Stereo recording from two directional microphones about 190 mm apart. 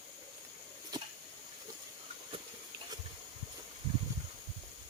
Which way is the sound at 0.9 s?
20° right (ahead or behind).